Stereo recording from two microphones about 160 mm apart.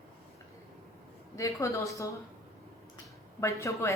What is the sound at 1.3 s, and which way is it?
Speech, 20° left (ahead or behind).